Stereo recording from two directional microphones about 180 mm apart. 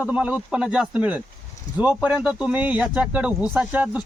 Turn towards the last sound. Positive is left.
turn(degrees=-5)  # may be behind; listen again after turning